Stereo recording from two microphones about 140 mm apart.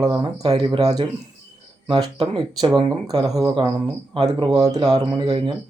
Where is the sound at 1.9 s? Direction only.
40° right (ahead or behind).